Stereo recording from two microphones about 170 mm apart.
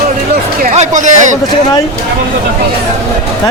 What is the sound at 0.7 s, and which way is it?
Speech, 45° right (ahead or behind).